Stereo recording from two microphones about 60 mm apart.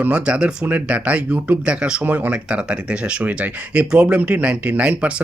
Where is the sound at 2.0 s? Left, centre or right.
Right.